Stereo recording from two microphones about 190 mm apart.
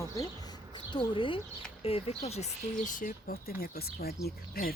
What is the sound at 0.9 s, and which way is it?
Speech, 25° left (ahead or behind).